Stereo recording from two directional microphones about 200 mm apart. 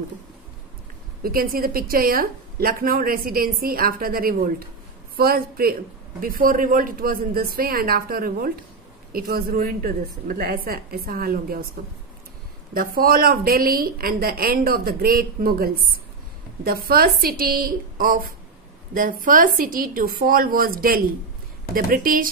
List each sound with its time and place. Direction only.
1.2 s a woman's voice: 45° right (ahead or behind)
12.7 s a woman's voice: 45° right (ahead or behind)